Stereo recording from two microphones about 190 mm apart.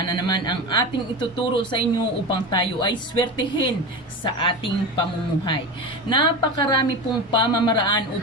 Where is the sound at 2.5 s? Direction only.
25° left (ahead or behind).